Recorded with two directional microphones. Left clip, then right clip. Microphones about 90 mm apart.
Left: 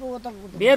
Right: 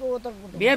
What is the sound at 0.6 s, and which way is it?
Speech, 10° right (ahead or behind).